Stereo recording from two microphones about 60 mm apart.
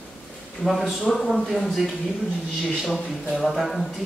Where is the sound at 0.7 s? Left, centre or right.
Centre.